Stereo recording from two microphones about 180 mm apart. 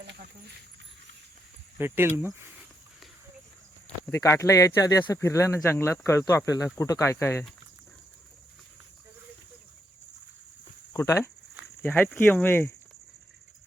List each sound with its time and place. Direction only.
1.8 s speech: 10° right (ahead or behind)
3.8 s speech: 15° left (ahead or behind)
10.9 s speech: 15° left (ahead or behind)